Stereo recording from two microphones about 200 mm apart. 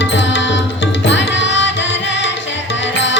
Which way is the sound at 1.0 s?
65° left (ahead or behind).